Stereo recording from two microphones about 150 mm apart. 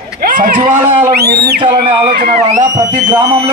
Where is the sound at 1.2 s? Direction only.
90° right.